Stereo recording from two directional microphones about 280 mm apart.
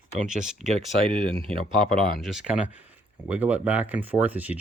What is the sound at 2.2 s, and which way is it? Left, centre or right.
Speech, centre.